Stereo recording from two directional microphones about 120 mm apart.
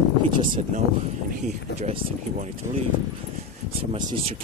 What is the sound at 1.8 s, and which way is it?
Speech, 70° right (ahead or behind).